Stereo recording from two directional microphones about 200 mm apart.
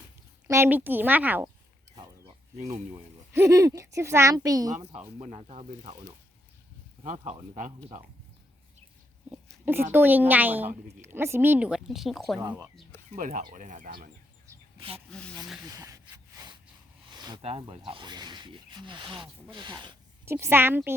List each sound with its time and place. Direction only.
0.4 s a child's voice: 10° right (ahead or behind)
3.3 s a child's voice: 15° right (ahead or behind)
5.0 s speech: 35° right (ahead or behind)
7.0 s speech: 40° right (ahead or behind)
9.3 s a sound: 10° right (ahead or behind)
9.9 s a child's voice: 10° right (ahead or behind)
12.4 s a child's voice: 15° right (ahead or behind)
13.1 s speech: 40° right (ahead or behind)
14.8 s speech: 25° right (ahead or behind)
15.7 s sawing: 15° right (ahead or behind)
17.1 s speech: 20° right (ahead or behind)
20.2 s a child's voice: 10° right (ahead or behind)